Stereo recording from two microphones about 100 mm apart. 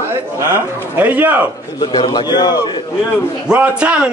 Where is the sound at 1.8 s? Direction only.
50° left (ahead or behind).